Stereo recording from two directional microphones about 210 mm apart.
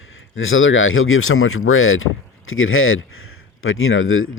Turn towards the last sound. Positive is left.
turn(degrees=75)  # may be behind; listen again after turning